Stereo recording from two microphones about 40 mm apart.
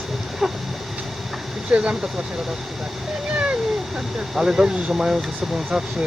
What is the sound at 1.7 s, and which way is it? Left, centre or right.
Speech, right.